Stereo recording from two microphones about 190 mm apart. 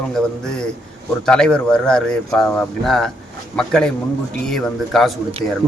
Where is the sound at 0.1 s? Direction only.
5° left (ahead or behind).